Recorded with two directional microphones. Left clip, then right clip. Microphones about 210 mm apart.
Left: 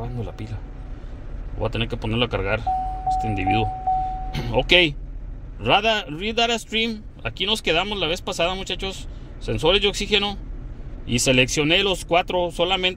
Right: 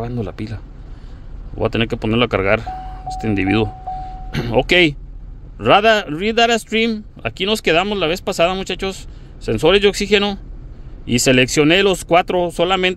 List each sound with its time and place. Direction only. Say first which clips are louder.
0.0 s speech: right 8 dB; 45° right (ahead or behind)
1.6 s speech: right 7 dB; 45° right (ahead or behind)